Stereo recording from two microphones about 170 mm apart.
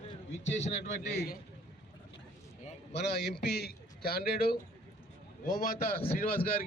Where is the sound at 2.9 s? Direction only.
90° left; by 4.5 s 65° left (ahead or behind).